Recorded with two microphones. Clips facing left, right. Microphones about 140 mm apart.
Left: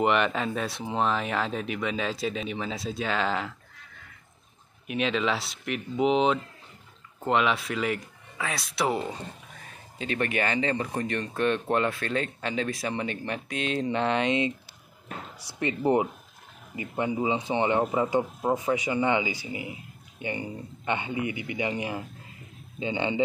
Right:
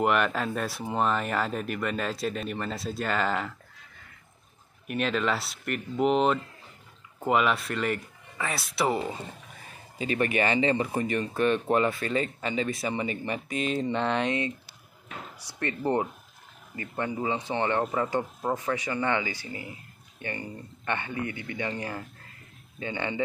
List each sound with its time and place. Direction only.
0.0 s speech: 5° right (ahead or behind)
4.8 s speech: centre (ahead or behind)
15.6 s speech: 15° left (ahead or behind)